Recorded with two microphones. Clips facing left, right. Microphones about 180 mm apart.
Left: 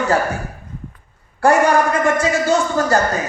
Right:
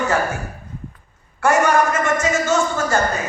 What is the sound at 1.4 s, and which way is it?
Speech, 35° left (ahead or behind).